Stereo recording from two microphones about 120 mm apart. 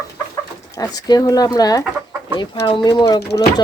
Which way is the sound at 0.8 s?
35° left (ahead or behind).